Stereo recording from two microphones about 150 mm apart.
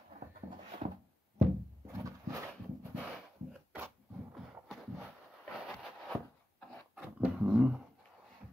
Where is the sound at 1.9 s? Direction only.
20° right (ahead or behind).